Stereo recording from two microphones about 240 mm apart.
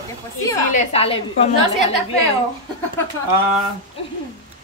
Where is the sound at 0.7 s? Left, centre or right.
Left.